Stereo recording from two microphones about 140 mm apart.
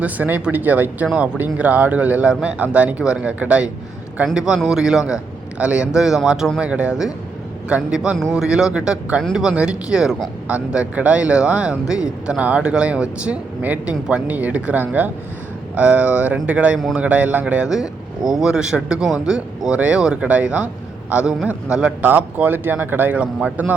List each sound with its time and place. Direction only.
0.0 s a man's voice: 10° right (ahead or behind)